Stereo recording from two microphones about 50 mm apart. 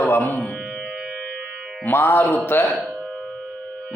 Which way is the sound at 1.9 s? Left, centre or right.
Left.